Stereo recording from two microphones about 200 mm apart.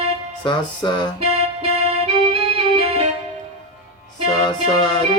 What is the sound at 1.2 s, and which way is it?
Keyboard, 30° right (ahead or behind).